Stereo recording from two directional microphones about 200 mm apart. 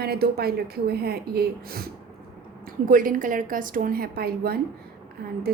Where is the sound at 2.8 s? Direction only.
45° right (ahead or behind).